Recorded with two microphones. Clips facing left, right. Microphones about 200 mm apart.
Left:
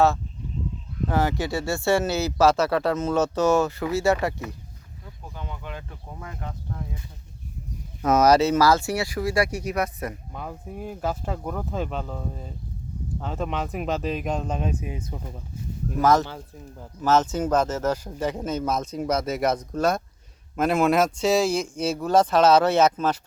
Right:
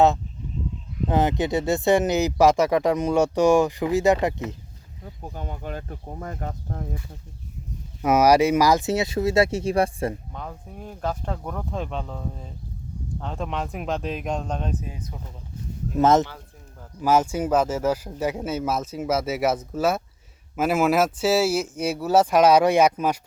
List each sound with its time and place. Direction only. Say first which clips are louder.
1.0 s speech: right 2 dB; 20° right (ahead or behind)
5.2 s speech: right 4 dB; 45° right (ahead or behind)
8.0 s speech: right 1 dB; 10° right (ahead or behind); by 10.2 s 30° right (ahead or behind)
10.3 s speech: left 2 dB; 5° left (ahead or behind)
16.0 s speech: right 2 dB; 25° right (ahead or behind)
17.0 s speech: right 1 dB; 10° right (ahead or behind)